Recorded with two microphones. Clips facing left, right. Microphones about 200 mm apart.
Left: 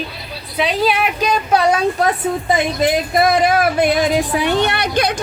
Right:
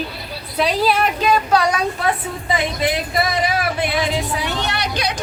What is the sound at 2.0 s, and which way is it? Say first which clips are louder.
A woman's voice: left 5 dB; 45° left (ahead or behind).